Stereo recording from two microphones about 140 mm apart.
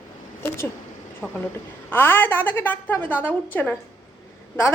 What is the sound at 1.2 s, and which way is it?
A woman's voice, 15° left (ahead or behind).